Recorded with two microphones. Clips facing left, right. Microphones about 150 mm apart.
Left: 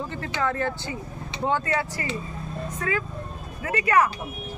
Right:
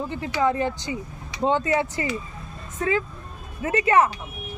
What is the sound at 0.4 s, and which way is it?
Speech, 15° right (ahead or behind).